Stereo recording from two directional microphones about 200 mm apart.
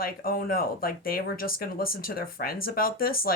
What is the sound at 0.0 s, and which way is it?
Speech, 45° left (ahead or behind).